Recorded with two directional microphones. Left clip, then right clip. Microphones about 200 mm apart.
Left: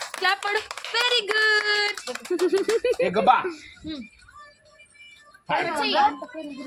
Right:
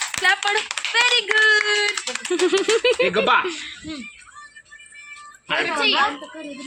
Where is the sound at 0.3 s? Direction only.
65° left (ahead or behind).